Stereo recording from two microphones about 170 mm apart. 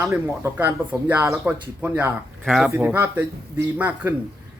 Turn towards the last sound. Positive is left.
turn(degrees=-10)  # may be behind; listen again after turning